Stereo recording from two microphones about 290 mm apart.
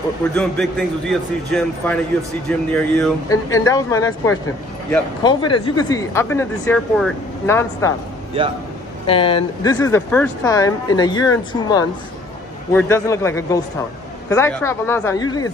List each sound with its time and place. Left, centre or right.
0.4 s speech: centre
8.4 s a man's voice: centre
9.0 s speech: centre